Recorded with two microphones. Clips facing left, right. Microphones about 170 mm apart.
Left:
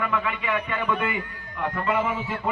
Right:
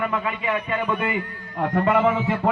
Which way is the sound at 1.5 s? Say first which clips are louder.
Right 5 dB; 45° right (ahead or behind).